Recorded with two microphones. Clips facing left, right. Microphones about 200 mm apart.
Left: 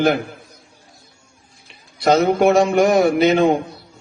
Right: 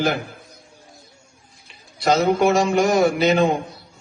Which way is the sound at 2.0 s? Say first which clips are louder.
Left 3 dB; 55° left (ahead or behind).